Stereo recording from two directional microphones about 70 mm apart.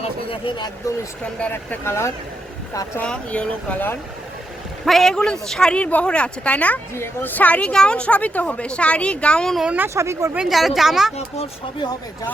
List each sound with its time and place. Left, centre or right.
0.8 s speech: left
1.2 s speech: centre
1.8 s speech: left
3.0 s speech: centre
4.9 s a woman's voice: centre
6.9 s a woman's voice: left; by 9.6 s centre
9.6 s speech: right
9.9 s speech: right
10.5 s speech: centre